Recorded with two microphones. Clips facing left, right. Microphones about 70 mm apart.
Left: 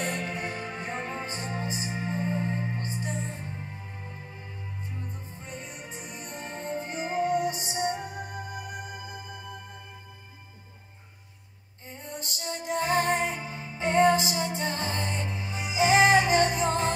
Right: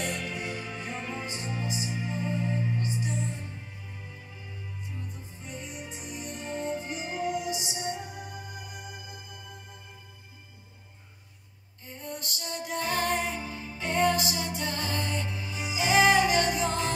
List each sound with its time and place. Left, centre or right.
0.0 s music: left
5.4 s music: left
12.2 s music: left